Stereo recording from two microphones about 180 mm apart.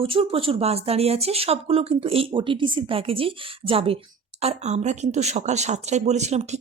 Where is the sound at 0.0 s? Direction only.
30° right (ahead or behind).